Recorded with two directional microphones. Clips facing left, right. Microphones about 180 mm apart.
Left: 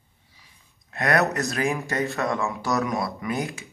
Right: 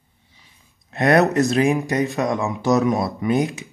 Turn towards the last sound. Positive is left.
turn(degrees=-20)  # may be behind; listen again after turning